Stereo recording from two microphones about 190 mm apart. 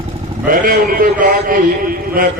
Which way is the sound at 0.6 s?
50° right (ahead or behind).